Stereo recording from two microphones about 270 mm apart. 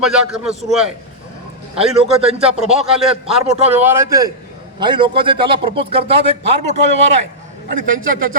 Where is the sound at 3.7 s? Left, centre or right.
Centre; by 6.7 s right.